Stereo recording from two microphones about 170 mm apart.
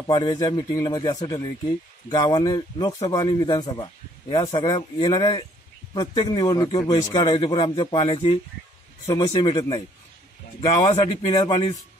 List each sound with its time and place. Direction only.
0.0 s speech: 25° left (ahead or behind)
8.0 s speech: 40° left (ahead or behind)
9.0 s speech: 20° left (ahead or behind)
9.3 s speech: 35° left (ahead or behind)
9.6 s speech: 25° left (ahead or behind)
10.9 s speech: 30° left (ahead or behind)